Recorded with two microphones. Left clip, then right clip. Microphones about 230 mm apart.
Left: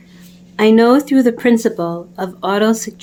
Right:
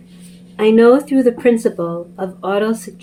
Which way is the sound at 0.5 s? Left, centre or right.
Left.